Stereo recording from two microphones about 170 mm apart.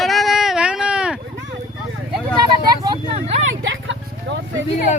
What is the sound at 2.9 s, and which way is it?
Speech, 35° right (ahead or behind).